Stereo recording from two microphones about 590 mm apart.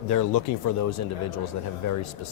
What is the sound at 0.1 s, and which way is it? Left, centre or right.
Speech, left.